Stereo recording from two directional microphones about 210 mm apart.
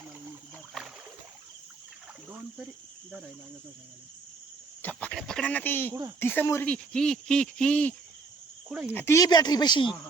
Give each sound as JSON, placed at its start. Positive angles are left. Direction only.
{"t": 4.8, "sound": "speech", "side_deg": 5}